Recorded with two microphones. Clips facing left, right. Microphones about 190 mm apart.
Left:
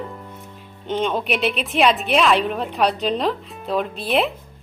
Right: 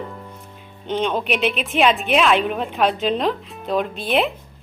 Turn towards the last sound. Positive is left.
turn(degrees=0)  # may be behind; listen again after turning